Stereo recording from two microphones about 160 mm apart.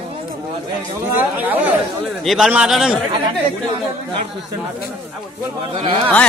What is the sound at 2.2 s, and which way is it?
Speech, centre (ahead or behind).